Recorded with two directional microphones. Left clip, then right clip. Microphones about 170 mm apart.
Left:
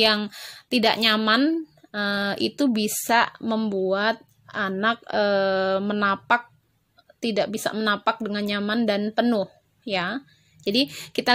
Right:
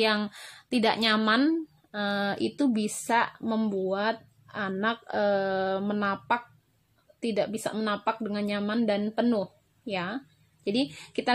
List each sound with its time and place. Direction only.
0.0 s a woman's voice: 20° left (ahead or behind)